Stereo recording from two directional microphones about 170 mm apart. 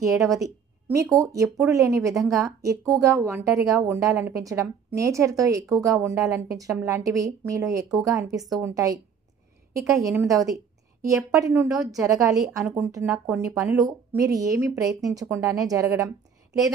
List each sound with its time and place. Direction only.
0.0 s a woman's voice: 20° right (ahead or behind)